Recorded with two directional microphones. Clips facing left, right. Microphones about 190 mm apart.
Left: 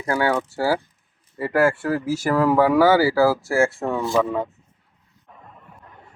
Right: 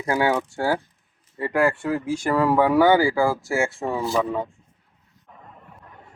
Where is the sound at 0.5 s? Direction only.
5° left (ahead or behind).